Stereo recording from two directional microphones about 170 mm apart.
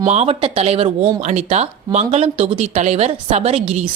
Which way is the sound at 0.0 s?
40° right (ahead or behind).